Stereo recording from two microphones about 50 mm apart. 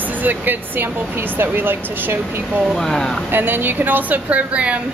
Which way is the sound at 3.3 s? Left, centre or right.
Right.